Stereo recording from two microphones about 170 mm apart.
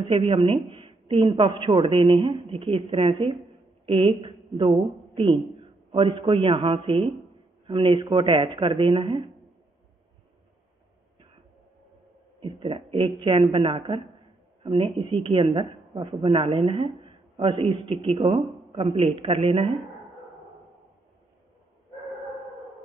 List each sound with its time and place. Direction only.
0.1 s a woman's voice: 30° right (ahead or behind)
12.4 s speech: 30° right (ahead or behind)